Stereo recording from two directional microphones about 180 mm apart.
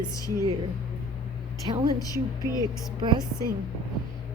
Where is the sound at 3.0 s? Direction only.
25° right (ahead or behind).